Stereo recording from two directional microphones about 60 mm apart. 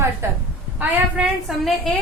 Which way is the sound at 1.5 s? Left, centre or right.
Centre.